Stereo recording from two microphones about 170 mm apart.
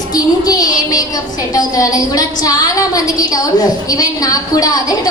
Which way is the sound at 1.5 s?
20° left (ahead or behind).